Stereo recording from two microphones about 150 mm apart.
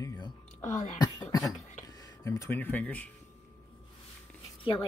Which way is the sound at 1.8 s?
25° left (ahead or behind).